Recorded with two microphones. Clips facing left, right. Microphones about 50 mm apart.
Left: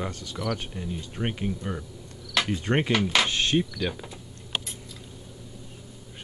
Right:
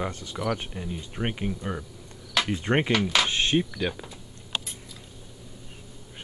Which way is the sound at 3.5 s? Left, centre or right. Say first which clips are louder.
Even; centre.